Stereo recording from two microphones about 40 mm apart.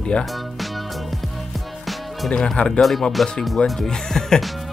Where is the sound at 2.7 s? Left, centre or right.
Centre.